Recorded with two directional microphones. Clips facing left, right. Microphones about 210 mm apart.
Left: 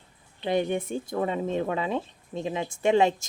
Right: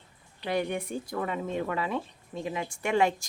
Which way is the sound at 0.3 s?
25° left (ahead or behind).